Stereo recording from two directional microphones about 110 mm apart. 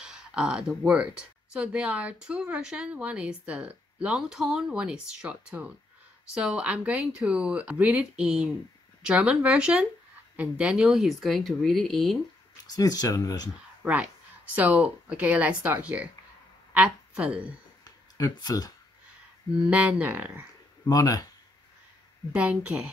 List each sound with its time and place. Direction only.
0.0 s speech: 5° right (ahead or behind)
12.6 s speech: 35° left (ahead or behind)
13.8 s speech: 15° right (ahead or behind)
17.8 s a sound: 35° left (ahead or behind)
19.7 s speech: 15° right (ahead or behind)
20.9 s speech: 35° left (ahead or behind)
22.3 s speech: 10° right (ahead or behind)